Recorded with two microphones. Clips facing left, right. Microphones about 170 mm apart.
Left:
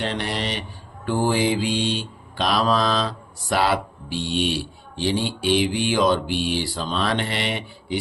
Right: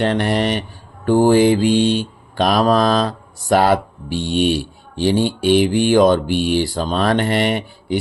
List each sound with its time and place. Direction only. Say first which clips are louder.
0.0 s mantra: right 9 dB; 55° right (ahead or behind)